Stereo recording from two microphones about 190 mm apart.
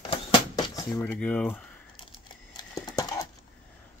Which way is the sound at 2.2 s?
20° left (ahead or behind).